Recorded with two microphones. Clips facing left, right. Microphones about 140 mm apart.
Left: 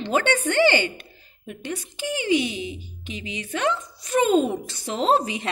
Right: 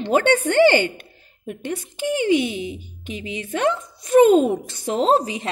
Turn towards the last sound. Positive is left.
turn(degrees=-35)  # may be behind; listen again after turning